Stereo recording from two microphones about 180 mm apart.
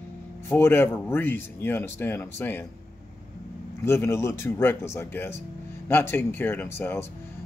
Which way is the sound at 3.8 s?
15° left (ahead or behind).